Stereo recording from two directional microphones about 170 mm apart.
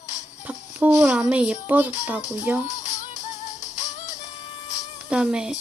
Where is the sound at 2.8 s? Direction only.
45° left (ahead or behind).